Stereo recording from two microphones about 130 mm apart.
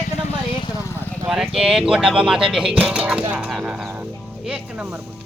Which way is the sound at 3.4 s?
5° right (ahead or behind).